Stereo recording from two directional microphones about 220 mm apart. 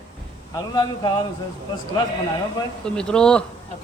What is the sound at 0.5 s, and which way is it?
Speech, 20° left (ahead or behind).